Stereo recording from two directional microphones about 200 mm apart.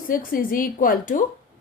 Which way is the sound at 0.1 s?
45° left (ahead or behind).